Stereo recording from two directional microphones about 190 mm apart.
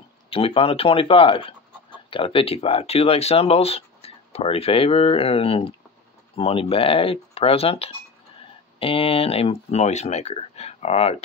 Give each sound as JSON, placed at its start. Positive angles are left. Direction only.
{"t": 0.3, "sound": "speech", "side_deg": 30}